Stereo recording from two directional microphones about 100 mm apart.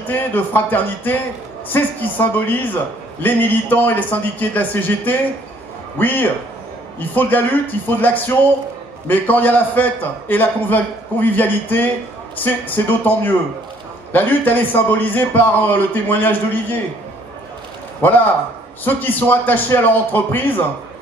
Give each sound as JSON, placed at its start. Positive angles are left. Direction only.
{"t": 0.1, "sound": "a man's voice", "side_deg": 20}
{"t": 18.0, "sound": "a man's voice", "side_deg": 20}